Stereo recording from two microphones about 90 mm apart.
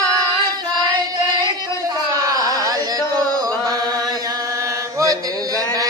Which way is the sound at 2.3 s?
40° right (ahead or behind).